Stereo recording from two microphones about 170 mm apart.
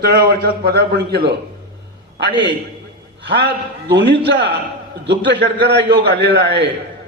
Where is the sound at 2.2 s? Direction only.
80° right.